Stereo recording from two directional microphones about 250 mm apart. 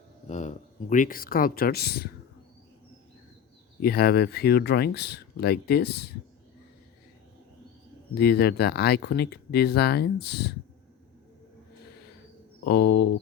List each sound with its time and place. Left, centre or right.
0.3 s speech: left
3.8 s speech: left
8.1 s speech: left
12.6 s speech: left